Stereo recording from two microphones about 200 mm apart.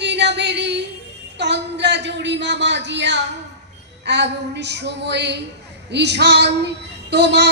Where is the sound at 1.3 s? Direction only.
60° right (ahead or behind).